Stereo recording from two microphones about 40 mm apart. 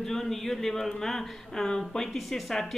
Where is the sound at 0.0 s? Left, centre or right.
Centre.